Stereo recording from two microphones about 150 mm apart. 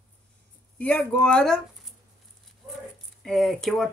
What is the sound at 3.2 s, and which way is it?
Speech, centre (ahead or behind).